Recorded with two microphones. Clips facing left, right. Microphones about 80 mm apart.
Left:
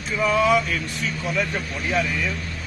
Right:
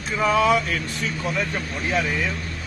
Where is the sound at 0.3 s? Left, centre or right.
Right.